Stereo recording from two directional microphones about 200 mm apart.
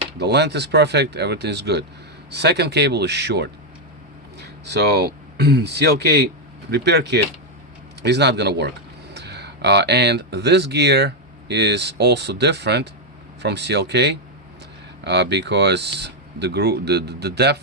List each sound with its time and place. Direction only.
0.2 s speech: 55° right (ahead or behind)
4.6 s speech: 55° right (ahead or behind)